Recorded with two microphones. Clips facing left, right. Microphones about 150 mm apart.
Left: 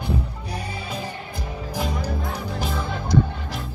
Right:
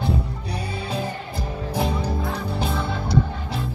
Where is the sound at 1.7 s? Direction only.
30° right (ahead or behind).